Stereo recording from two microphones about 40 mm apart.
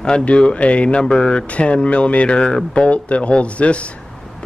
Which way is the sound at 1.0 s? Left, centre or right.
Centre.